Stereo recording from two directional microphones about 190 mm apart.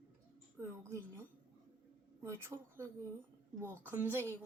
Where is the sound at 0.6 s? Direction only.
15° right (ahead or behind).